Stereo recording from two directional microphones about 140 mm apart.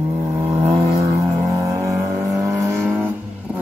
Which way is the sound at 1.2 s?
25° right (ahead or behind).